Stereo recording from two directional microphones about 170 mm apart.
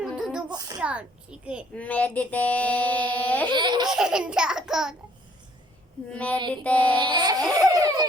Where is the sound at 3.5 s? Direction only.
25° right (ahead or behind).